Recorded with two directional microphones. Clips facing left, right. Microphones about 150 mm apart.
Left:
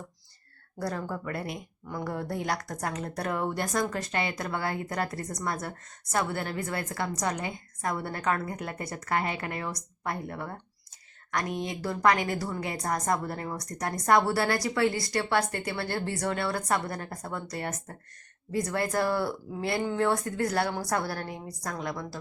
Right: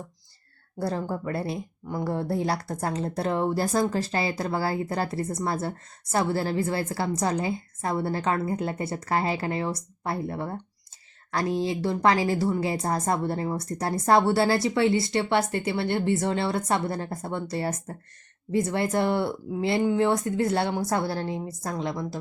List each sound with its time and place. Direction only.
0.8 s speech: 25° right (ahead or behind)